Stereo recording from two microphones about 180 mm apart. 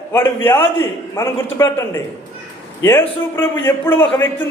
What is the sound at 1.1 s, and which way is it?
Speech, 15° left (ahead or behind).